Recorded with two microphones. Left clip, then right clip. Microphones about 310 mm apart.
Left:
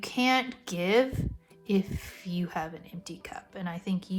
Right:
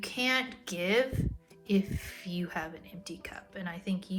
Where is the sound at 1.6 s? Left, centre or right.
Centre.